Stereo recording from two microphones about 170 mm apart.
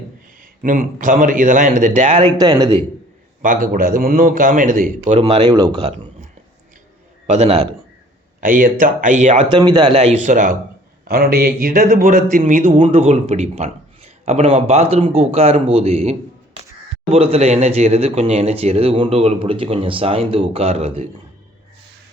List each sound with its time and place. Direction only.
0.6 s a man's voice: 55° right (ahead or behind)
2.4 s a man's voice: 25° right (ahead or behind)
3.4 s a man's voice: 50° right (ahead or behind); by 5.9 s 25° right (ahead or behind)
7.3 s speech: 35° right (ahead or behind)
8.4 s a man's voice: 55° right (ahead or behind)
9.5 s a man's voice: 25° right (ahead or behind)
9.9 s a man's voice: 40° right (ahead or behind)
11.0 s a man's voice: 60° right (ahead or behind)
12.7 s speech: 35° right (ahead or behind)